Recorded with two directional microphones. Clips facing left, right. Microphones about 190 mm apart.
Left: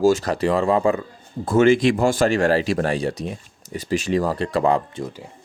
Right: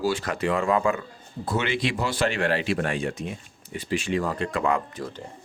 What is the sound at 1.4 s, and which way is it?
Speech, 45° left (ahead or behind).